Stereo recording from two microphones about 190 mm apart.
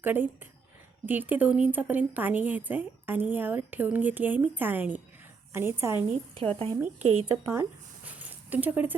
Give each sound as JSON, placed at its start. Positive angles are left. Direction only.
{"t": 0.0, "sound": "a woman's voice", "side_deg": -10}
{"t": 6.6, "sound": "a woman's voice", "side_deg": -30}
{"t": 7.3, "sound": "speech", "side_deg": -15}